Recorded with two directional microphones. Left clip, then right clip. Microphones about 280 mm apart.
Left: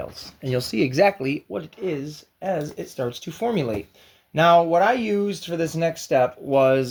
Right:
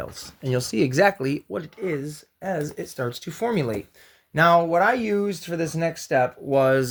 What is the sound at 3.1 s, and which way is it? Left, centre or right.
Speech, right.